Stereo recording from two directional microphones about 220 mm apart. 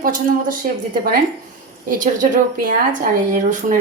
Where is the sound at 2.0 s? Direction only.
35° right (ahead or behind).